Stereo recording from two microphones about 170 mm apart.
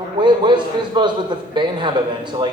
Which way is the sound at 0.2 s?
25° right (ahead or behind).